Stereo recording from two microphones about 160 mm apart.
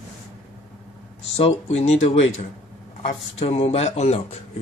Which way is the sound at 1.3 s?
40° left (ahead or behind).